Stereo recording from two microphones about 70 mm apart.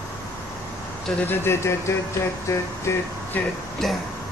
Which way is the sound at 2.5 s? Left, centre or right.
Left.